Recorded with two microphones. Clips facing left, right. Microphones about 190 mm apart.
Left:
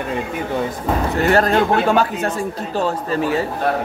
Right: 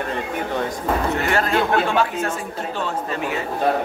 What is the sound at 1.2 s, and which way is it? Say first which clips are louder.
Speech: left 5 dB; 40° left (ahead or behind).